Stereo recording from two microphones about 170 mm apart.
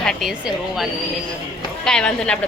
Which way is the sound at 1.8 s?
5° left (ahead or behind).